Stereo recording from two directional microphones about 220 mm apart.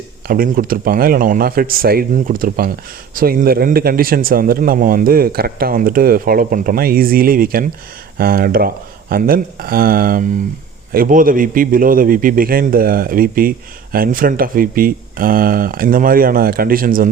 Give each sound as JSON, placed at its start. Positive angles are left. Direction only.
{"t": 0.3, "sound": "speech", "side_deg": -40}